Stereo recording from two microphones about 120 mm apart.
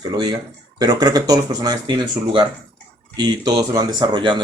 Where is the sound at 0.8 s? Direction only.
30° right (ahead or behind).